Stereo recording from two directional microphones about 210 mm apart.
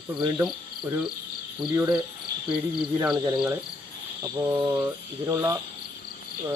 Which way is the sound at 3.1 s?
20° right (ahead or behind).